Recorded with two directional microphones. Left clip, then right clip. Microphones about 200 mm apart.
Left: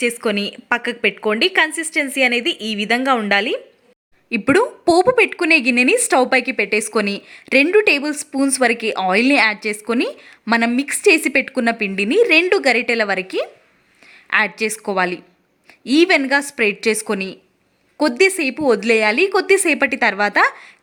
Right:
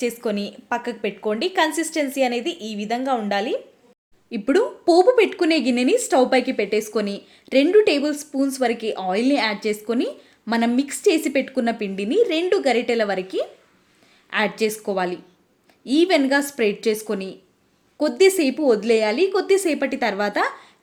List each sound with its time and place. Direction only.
0.0 s a woman's voice: 20° left (ahead or behind)